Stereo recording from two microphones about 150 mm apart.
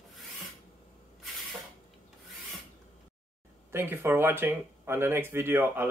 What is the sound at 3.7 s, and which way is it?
Speech, 15° right (ahead or behind).